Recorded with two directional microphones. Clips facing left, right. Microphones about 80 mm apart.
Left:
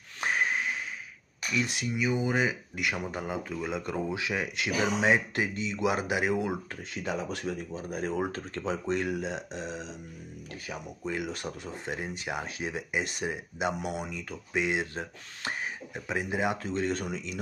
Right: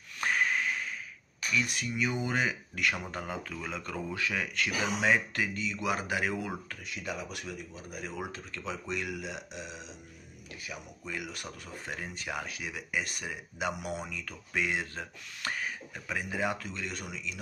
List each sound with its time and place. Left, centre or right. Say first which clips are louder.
0.2 s snort: left 1 dB; left
1.5 s speech: left 1 dB; left
2.0 s speech: left 3 dB; centre
6.9 s speech: left 5 dB; left